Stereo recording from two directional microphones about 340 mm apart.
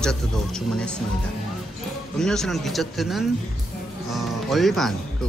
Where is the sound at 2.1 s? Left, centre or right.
Centre.